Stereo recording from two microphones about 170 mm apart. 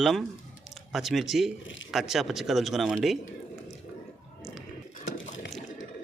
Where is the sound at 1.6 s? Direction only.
90° left.